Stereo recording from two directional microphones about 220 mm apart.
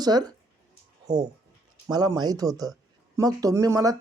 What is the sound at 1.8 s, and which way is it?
A man's voice, 15° right (ahead or behind).